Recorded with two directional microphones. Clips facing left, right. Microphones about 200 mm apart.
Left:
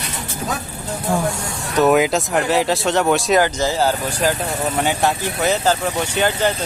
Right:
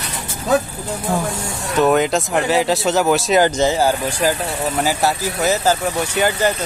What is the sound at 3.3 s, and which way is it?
Speech, 20° right (ahead or behind).